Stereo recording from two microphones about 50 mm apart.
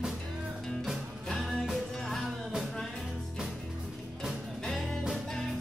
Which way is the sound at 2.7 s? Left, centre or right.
Centre.